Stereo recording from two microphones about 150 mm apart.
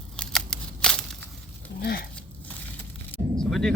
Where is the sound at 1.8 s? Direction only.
85° left.